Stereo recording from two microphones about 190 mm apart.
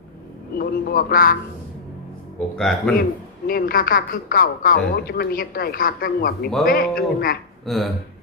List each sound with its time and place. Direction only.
0.6 s a woman's voice: 50° left (ahead or behind)
2.6 s speech: 5° left (ahead or behind)
3.4 s a woman's voice: 50° left (ahead or behind)
7.6 s speech: centre (ahead or behind)